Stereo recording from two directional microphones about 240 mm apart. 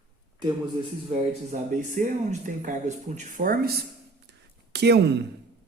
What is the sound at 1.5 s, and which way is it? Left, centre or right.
Speech, right.